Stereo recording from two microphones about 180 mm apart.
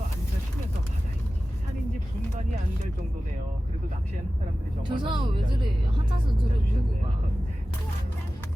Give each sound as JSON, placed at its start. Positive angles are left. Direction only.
{"t": 4.8, "sound": "speech", "side_deg": -25}